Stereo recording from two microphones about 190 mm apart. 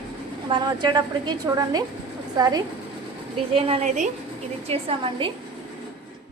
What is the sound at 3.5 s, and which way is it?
A woman's voice, 30° right (ahead or behind).